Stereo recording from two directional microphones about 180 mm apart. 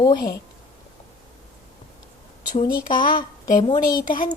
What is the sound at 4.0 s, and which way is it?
Speech, 50° left (ahead or behind).